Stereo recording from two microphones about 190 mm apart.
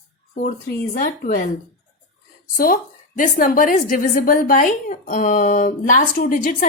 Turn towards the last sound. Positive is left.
turn(degrees=45)  # may be behind; listen again after turning